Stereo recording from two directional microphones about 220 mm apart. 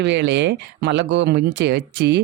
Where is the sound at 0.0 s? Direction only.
50° right (ahead or behind).